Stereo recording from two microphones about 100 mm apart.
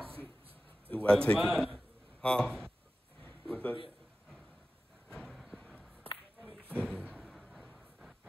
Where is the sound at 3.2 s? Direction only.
10° left (ahead or behind).